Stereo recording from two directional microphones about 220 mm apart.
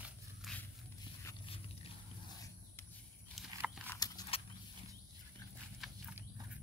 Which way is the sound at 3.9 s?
15° left (ahead or behind).